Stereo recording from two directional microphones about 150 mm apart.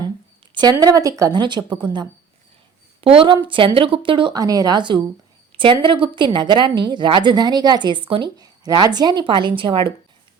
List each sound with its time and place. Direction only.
0.5 s a woman's voice: 25° right (ahead or behind)
4.4 s a woman's voice: 25° right (ahead or behind)